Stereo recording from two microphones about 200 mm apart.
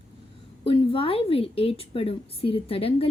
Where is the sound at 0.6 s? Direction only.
25° left (ahead or behind).